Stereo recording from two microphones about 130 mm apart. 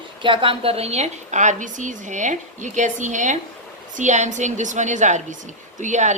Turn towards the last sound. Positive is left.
turn(degrees=-65)  # may be behind; listen again after turning